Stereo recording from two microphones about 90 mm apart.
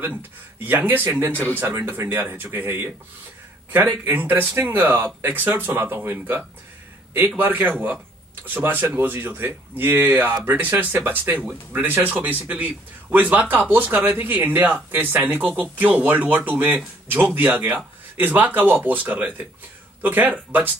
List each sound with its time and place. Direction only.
0.6 s speech: 20° right (ahead or behind)
17.5 s speech: 35° right (ahead or behind)
17.7 s speech: 20° right (ahead or behind)